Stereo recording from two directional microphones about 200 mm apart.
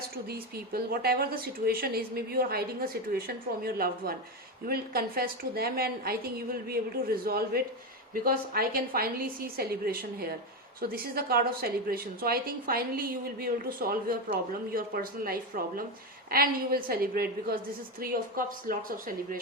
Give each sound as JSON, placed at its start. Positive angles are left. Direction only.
{"t": 0.3, "sound": "a woman's voice", "side_deg": -50}